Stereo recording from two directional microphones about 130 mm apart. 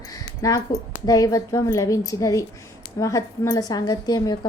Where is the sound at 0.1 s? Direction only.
25° left (ahead or behind).